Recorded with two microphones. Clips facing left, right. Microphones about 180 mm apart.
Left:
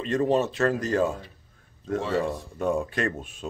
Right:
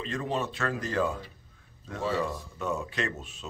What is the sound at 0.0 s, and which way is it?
Speech, 40° left (ahead or behind).